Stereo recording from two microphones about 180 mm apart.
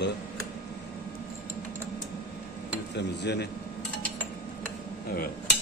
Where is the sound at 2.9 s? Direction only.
70° left (ahead or behind).